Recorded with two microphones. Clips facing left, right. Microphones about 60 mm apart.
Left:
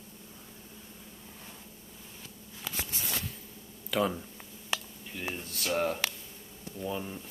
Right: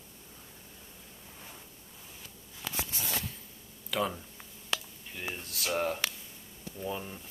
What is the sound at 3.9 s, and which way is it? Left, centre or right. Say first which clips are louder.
Speech: left 3 dB; centre.